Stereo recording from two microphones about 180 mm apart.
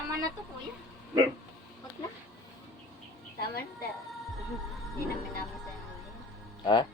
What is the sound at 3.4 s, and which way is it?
Speech, 55° left (ahead or behind).